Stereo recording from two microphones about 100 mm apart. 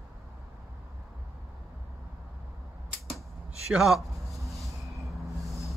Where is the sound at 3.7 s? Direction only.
5° right (ahead or behind).